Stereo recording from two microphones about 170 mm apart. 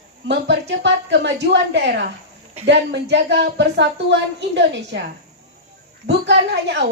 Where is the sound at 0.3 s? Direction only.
90° right.